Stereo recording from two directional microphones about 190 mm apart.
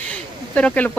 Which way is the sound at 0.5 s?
10° left (ahead or behind).